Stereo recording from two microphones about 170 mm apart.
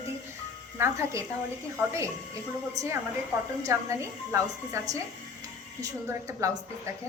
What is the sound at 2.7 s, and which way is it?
Speech, 15° right (ahead or behind).